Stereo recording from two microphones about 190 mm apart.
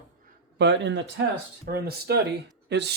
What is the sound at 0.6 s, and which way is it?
Speech, 65° right (ahead or behind).